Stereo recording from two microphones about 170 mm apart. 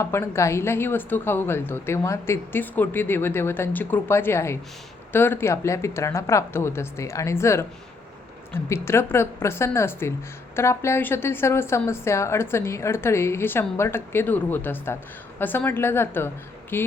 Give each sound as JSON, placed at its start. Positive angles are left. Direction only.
{"t": 0.0, "sound": "a woman's voice", "side_deg": 15}